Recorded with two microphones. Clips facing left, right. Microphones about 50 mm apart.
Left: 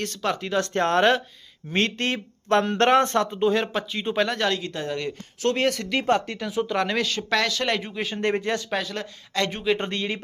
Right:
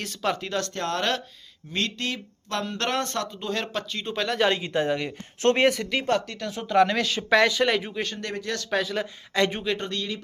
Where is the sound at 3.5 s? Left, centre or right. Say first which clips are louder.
Left 5 dB; centre.